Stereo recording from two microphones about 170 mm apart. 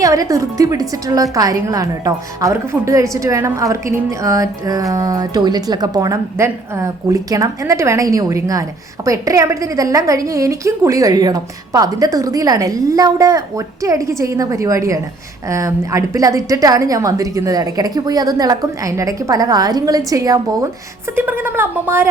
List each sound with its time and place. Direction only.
0.0 s a woman's voice: 20° right (ahead or behind)